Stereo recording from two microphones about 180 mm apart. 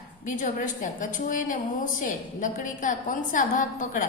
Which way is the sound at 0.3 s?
45° left (ahead or behind).